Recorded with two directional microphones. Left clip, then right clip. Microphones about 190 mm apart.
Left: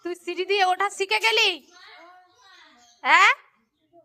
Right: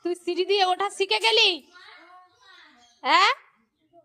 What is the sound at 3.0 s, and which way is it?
Speech, 30° right (ahead or behind).